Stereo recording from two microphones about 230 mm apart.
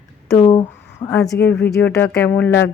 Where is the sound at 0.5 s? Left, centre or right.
Centre.